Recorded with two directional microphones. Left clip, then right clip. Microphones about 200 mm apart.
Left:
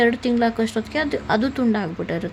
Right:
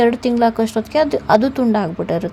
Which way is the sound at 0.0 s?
15° right (ahead or behind).